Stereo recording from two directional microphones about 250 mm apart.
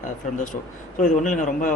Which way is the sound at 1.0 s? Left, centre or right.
Left.